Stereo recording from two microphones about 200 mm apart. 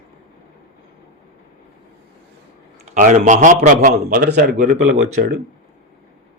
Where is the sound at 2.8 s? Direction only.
35° right (ahead or behind).